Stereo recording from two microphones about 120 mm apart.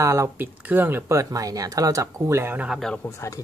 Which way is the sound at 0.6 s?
15° right (ahead or behind).